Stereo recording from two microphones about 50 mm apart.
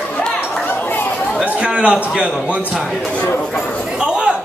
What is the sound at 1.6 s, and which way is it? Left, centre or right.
Speech, right.